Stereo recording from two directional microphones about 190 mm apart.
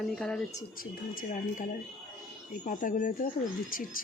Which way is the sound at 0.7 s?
45° left (ahead or behind).